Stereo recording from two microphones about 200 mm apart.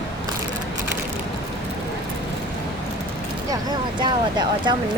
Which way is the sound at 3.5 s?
20° right (ahead or behind).